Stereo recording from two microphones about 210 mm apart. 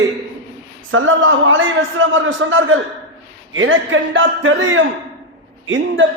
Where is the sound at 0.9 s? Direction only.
70° right (ahead or behind).